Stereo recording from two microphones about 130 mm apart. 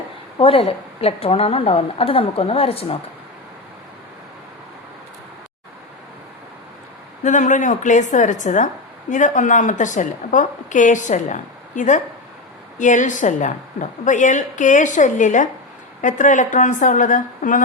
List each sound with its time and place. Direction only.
0.3 s a woman's voice: 45° left (ahead or behind)
7.3 s a woman's voice: 75° left (ahead or behind)